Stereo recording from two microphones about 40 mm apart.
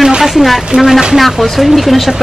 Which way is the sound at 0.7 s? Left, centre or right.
Right.